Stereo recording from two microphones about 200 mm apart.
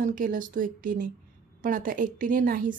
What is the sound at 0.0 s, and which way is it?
A woman's voice, 40° right (ahead or behind).